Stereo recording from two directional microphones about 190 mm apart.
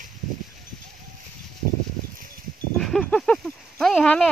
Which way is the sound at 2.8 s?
Centre (ahead or behind).